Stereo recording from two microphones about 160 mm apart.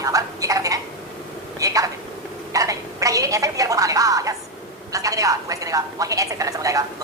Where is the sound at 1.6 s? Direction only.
20° right (ahead or behind).